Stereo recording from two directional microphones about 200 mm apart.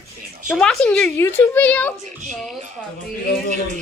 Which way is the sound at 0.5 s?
5° left (ahead or behind).